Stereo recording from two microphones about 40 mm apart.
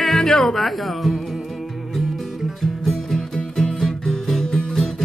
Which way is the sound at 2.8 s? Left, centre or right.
Centre.